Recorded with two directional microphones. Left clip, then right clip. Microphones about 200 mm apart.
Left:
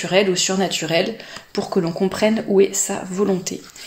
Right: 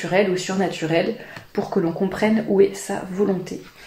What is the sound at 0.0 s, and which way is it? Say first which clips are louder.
Speech: left 2 dB; 35° left (ahead or behind).